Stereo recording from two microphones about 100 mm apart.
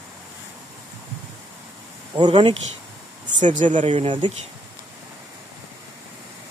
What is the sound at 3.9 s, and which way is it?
Speech, 75° right (ahead or behind).